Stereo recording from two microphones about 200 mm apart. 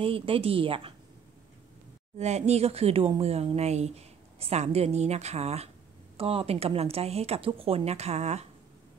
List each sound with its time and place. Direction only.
0.0 s speech: 25° right (ahead or behind)
2.1 s speech: 35° right (ahead or behind)